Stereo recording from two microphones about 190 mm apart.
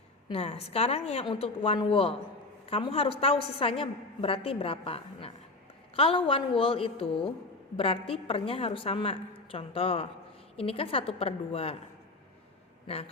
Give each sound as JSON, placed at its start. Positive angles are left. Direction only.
{"t": 0.3, "sound": "a woman's voice", "side_deg": 30}